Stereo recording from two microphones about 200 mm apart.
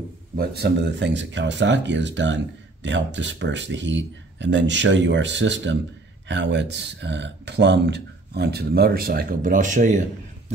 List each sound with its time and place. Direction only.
0.4 s speech: 55° right (ahead or behind)